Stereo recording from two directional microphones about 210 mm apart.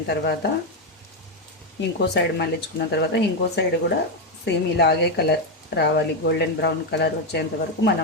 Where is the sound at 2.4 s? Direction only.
50° left (ahead or behind).